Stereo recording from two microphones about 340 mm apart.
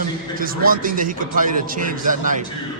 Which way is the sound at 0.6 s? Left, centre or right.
Right.